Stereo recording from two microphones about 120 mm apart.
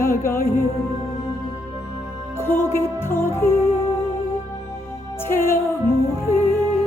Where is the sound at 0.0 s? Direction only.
25° left (ahead or behind).